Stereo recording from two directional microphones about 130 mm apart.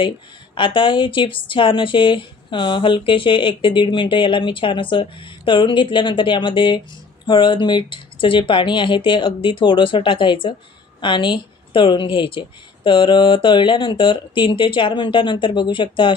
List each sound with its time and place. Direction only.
0.5 s speech: 40° left (ahead or behind)